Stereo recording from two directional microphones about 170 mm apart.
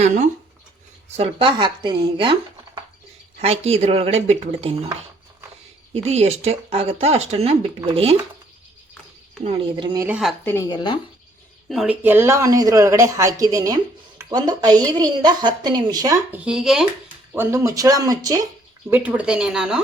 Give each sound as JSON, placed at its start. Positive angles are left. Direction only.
{"t": 0.0, "sound": "speech", "side_deg": -45}
{"t": 1.1, "sound": "a woman's voice", "side_deg": -35}
{"t": 3.4, "sound": "speech", "side_deg": -40}
{"t": 5.9, "sound": "speech", "side_deg": -40}
{"t": 9.4, "sound": "speech", "side_deg": -35}
{"t": 9.9, "sound": "a woman's voice", "side_deg": -20}
{"t": 10.4, "sound": "a woman's voice", "side_deg": 15}
{"t": 10.7, "sound": "speech", "side_deg": 25}
{"t": 11.7, "sound": "speech", "side_deg": 0}
{"t": 12.0, "sound": "a woman's voice", "side_deg": -15}
{"t": 16.3, "sound": "speech", "side_deg": -5}
{"t": 17.3, "sound": "a woman's voice", "side_deg": -15}
{"t": 18.9, "sound": "speech", "side_deg": -10}